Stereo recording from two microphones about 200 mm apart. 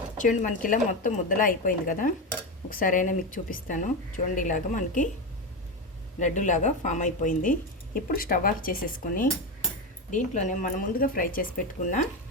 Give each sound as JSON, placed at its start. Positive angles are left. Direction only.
{"t": 0.2, "sound": "a woman's voice", "side_deg": 40}
{"t": 6.1, "sound": "a woman's voice", "side_deg": 35}